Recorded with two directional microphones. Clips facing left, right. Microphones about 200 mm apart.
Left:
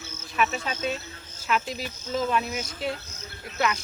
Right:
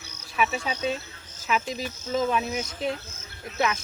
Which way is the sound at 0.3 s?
10° right (ahead or behind).